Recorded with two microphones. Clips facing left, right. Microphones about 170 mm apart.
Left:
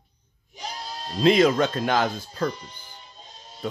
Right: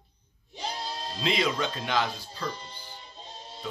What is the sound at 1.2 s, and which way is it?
Speech, 50° left (ahead or behind).